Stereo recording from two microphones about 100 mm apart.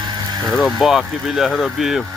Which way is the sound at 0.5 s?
Centre (ahead or behind).